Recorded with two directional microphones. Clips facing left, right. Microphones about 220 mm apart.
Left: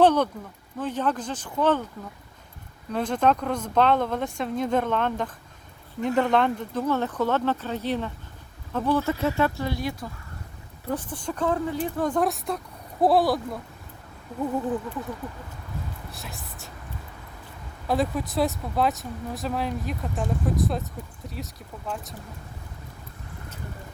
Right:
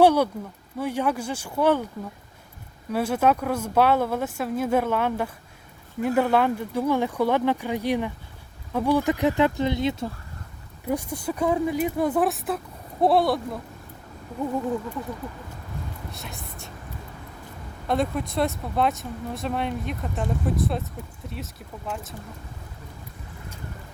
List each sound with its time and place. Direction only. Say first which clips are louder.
0.0 s speech: right 1 dB; 10° right (ahead or behind)
2.9 s speech: right 1 dB; 10° right (ahead or behind)
10.8 s speech: right 3 dB; 10° right (ahead or behind)
16.1 s whispering: right 2 dB; centre (ahead or behind)
17.8 s speech: even; centre (ahead or behind)